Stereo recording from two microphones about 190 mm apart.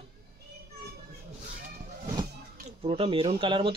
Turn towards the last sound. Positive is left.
turn(degrees=-25)  # may be behind; listen again after turning